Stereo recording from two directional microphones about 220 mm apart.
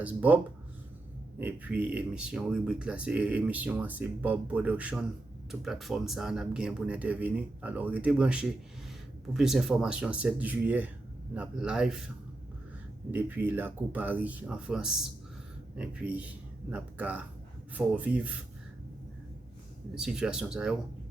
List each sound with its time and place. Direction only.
0.0 s speech: 5° right (ahead or behind)
1.4 s a man's voice: 5° right (ahead or behind)
19.9 s speech: 5° right (ahead or behind)